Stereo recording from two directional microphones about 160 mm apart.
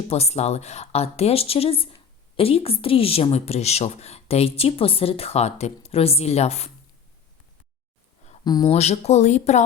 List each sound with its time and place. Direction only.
0.1 s a woman's voice: 40° left (ahead or behind)
8.6 s speech: 40° left (ahead or behind)